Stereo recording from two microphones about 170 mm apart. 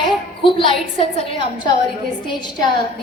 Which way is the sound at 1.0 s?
35° left (ahead or behind).